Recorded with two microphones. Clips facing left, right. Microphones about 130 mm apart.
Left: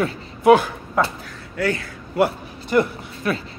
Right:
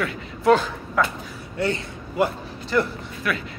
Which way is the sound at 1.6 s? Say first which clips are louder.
Left 2 dB; 25° right (ahead or behind).